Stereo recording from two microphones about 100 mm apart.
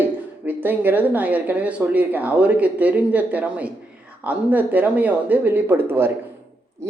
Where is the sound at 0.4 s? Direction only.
20° right (ahead or behind).